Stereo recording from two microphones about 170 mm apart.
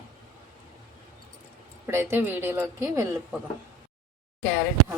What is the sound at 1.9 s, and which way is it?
Speech, 15° right (ahead or behind).